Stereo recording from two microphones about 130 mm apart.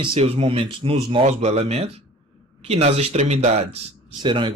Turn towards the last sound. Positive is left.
turn(degrees=-40)  # may be behind; listen again after turning